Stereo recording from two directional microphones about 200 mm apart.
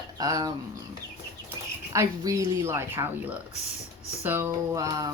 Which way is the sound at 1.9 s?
15° right (ahead or behind).